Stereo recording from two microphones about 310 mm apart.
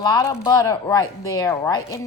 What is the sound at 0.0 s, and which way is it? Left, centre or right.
A woman's voice, centre.